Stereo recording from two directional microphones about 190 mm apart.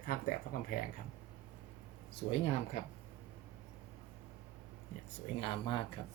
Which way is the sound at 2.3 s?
30° left (ahead or behind).